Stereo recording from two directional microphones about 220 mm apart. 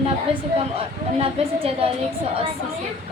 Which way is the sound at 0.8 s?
25° right (ahead or behind).